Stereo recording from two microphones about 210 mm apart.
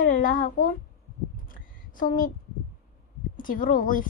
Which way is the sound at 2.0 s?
40° left (ahead or behind).